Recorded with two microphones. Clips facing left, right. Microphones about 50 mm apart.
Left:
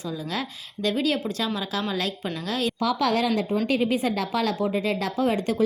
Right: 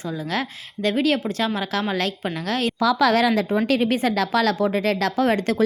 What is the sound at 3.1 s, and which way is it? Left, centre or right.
Speech, right.